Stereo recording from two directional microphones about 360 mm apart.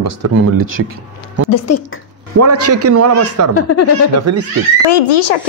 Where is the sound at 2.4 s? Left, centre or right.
Right.